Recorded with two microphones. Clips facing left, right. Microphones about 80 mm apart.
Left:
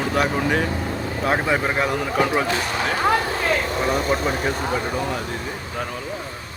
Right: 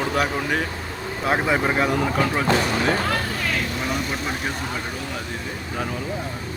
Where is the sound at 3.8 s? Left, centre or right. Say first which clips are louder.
Left 5 dB; left.